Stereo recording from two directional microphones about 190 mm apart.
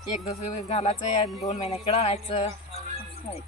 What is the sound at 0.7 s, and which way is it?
Speech, 35° left (ahead or behind).